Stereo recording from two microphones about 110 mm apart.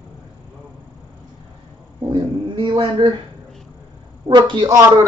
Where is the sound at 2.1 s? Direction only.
45° right (ahead or behind).